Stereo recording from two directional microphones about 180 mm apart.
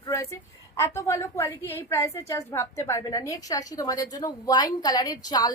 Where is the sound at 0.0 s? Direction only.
15° left (ahead or behind).